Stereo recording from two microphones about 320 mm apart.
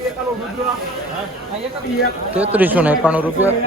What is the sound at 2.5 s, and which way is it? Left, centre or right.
Speech, centre.